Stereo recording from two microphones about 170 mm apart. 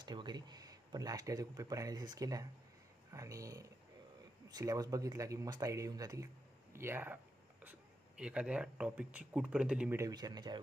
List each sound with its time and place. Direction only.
0.0 s speech: 25° right (ahead or behind)
8.2 s speech: 5° right (ahead or behind); by 10.6 s 25° right (ahead or behind)